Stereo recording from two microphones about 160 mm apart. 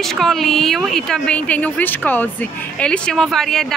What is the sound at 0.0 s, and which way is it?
Speech, centre (ahead or behind).